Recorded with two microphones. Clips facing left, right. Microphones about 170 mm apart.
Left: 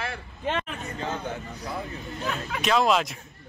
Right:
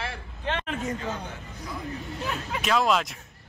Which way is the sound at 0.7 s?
90° right.